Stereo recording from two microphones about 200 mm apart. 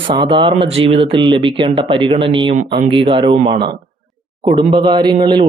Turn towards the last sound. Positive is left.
turn(degrees=-20)  # may be behind; listen again after turning